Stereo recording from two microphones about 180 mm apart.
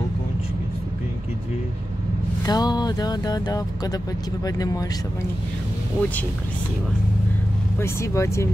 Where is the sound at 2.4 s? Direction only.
20° left (ahead or behind).